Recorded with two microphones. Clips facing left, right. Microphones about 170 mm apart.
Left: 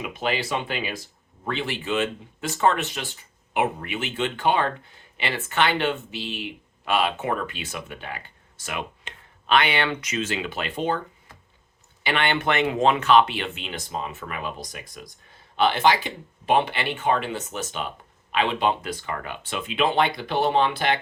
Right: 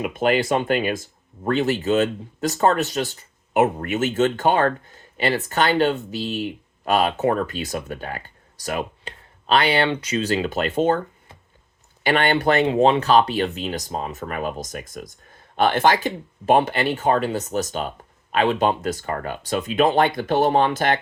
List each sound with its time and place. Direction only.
0.0 s speech: 50° right (ahead or behind)
12.0 s speech: 40° right (ahead or behind)